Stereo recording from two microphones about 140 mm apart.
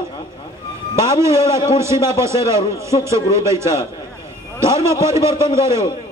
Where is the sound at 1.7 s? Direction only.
20° right (ahead or behind).